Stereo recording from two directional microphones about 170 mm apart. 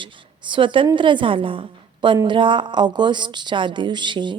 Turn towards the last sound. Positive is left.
turn(degrees=-25)  # may be behind; listen again after turning